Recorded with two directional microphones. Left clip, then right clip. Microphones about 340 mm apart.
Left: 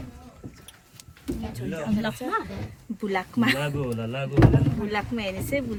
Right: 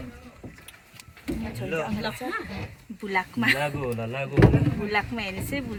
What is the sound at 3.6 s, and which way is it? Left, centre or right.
Speech, centre.